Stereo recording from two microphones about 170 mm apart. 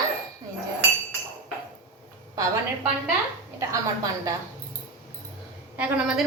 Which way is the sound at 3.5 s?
20° right (ahead or behind).